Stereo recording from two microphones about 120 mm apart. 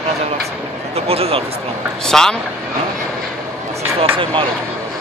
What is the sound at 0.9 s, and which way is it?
Speech, 55° right (ahead or behind).